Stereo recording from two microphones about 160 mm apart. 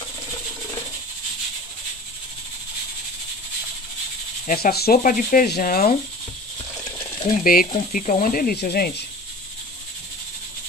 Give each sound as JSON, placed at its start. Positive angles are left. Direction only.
{"t": 4.5, "sound": "speech", "side_deg": 70}
{"t": 7.2, "sound": "speech", "side_deg": 60}